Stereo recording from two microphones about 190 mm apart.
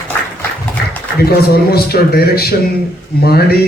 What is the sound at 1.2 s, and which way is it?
A man's voice, 55° left (ahead or behind).